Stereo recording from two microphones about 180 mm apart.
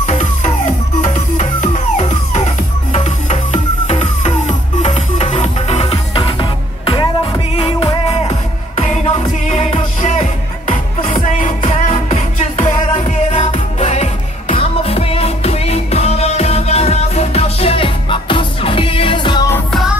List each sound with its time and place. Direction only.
0.0 s music: 40° left (ahead or behind); by 19.5 s 25° left (ahead or behind)